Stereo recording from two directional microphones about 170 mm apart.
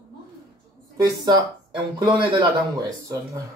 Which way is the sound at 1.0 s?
20° right (ahead or behind).